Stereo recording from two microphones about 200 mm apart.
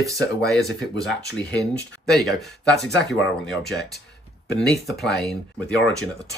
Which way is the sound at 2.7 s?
55° left (ahead or behind).